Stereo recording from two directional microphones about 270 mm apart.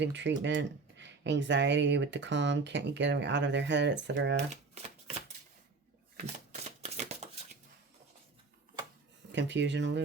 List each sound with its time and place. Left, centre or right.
0.0 s speech: right
6.1 s a sound: right
9.3 s speech: right